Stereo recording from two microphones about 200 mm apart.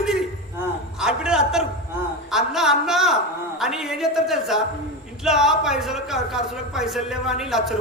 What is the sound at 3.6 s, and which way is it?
Speech, centre (ahead or behind).